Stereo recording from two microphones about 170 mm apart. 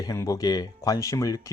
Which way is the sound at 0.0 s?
20° left (ahead or behind).